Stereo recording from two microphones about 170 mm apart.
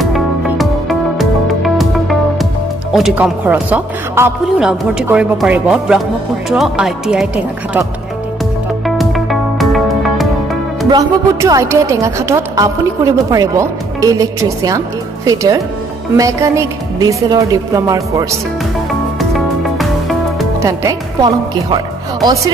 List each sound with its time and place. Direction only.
0.0 s music: centre (ahead or behind)
2.9 s speech: centre (ahead or behind)
8.8 s music: centre (ahead or behind)
10.9 s speech: 20° right (ahead or behind)
19.1 s music: centre (ahead or behind)
20.6 s speech: 20° right (ahead or behind)